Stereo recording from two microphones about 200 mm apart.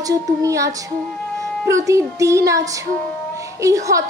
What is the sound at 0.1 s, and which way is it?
A woman's voice, 15° right (ahead or behind).